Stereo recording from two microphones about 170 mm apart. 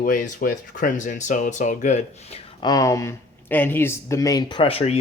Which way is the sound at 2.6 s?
20° left (ahead or behind).